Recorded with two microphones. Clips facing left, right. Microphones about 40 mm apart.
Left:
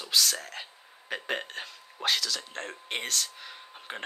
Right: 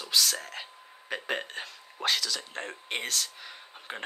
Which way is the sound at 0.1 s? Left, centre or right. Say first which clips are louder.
Even; centre.